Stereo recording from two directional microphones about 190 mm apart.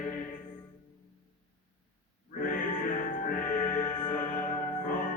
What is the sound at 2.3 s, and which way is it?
Music, 45° left (ahead or behind).